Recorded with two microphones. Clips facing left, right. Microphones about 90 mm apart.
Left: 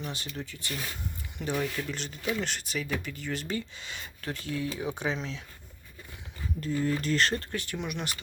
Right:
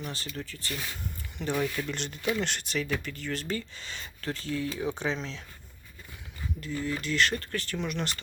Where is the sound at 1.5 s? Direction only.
Centre (ahead or behind).